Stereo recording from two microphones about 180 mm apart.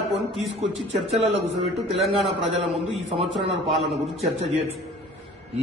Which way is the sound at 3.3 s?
Centre (ahead or behind).